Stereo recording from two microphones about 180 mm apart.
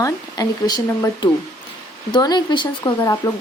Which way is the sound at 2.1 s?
25° left (ahead or behind).